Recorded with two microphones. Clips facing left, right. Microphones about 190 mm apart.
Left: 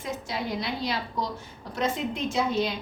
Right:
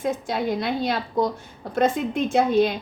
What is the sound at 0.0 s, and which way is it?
A woman's voice, 55° right (ahead or behind).